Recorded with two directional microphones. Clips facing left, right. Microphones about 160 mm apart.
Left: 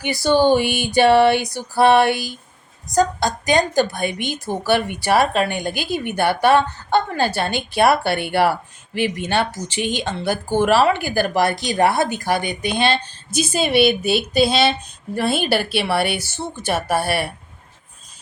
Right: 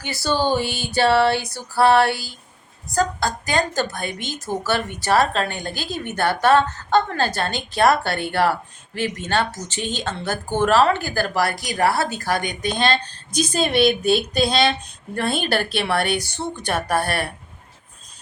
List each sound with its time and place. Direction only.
0.0 s speech: 15° left (ahead or behind)